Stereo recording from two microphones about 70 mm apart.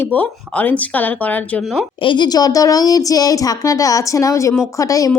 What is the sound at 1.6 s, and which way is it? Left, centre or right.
Speech, centre.